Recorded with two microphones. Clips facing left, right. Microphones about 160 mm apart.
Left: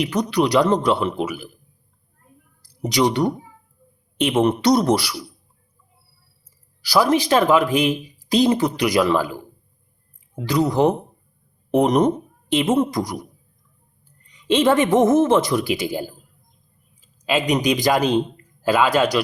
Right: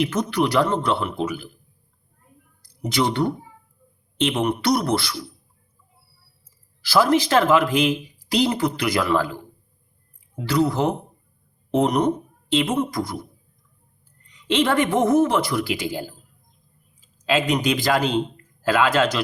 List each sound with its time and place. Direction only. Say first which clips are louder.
0.0 s speech: left 2 dB; 15° left (ahead or behind)
2.6 s speech: left 3 dB; 15° left (ahead or behind)
6.8 s speech: left 1 dB; 15° left (ahead or behind)
12.5 s a woman's voice: left 3 dB; 20° left (ahead or behind)
14.4 s speech: left 3 dB; 15° left (ahead or behind)
17.2 s speech: left 1 dB; 15° left (ahead or behind)